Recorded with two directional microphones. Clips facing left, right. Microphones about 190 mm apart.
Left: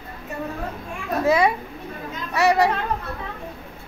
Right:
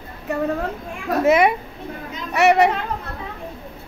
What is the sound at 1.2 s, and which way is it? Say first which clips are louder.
A woman's voice: right 3 dB; 20° right (ahead or behind).